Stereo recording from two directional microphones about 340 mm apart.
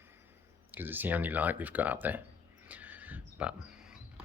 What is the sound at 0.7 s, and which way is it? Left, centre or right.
Speech, centre.